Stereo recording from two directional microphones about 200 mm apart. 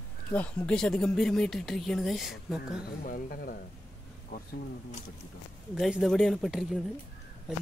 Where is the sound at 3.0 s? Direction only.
45° left (ahead or behind).